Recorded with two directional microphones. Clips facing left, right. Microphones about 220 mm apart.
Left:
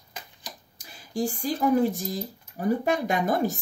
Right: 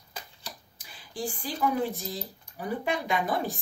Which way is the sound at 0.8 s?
45° left (ahead or behind).